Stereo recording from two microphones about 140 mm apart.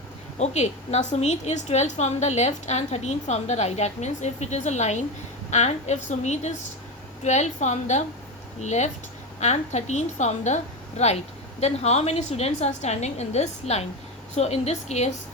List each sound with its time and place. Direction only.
0.3 s a woman's voice: 50° left (ahead or behind)